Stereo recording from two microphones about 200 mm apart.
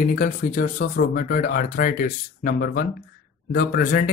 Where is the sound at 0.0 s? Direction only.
45° left (ahead or behind).